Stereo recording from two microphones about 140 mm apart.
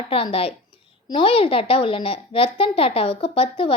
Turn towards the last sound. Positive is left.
turn(degrees=40)  # may be behind; listen again after turning